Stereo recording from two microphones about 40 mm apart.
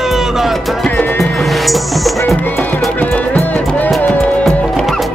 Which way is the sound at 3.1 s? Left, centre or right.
Left.